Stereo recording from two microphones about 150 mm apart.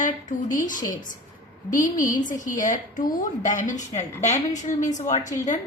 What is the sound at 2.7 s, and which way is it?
A woman's voice, 60° left (ahead or behind).